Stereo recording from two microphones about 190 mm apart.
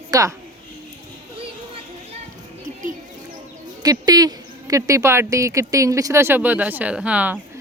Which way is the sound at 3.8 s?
20° right (ahead or behind).